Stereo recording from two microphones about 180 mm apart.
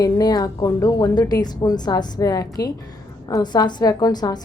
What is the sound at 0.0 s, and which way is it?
A woman's voice, 20° left (ahead or behind).